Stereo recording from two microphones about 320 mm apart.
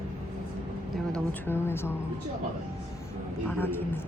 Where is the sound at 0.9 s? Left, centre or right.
Centre.